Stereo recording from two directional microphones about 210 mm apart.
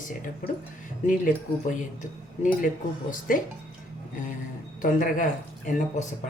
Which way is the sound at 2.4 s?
40° left (ahead or behind).